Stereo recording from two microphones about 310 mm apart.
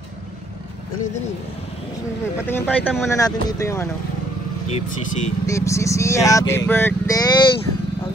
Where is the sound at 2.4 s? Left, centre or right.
Centre.